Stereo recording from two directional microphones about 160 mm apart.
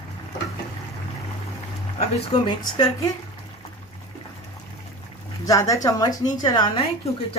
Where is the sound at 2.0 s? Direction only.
30° left (ahead or behind).